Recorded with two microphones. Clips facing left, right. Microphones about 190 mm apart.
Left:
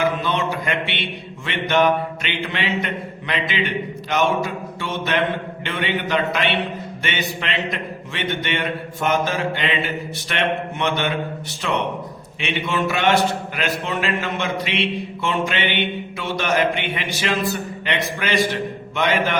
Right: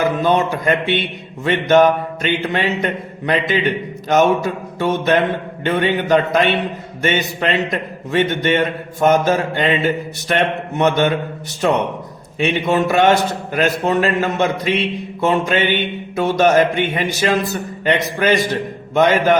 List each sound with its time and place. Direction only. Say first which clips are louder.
0.2 s a man's voice: right 7 dB; 45° right (ahead or behind)